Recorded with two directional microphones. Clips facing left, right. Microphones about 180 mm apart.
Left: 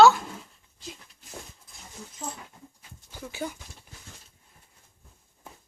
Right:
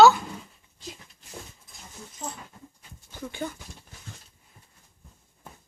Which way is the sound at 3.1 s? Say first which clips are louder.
Right 1 dB; 10° left (ahead or behind).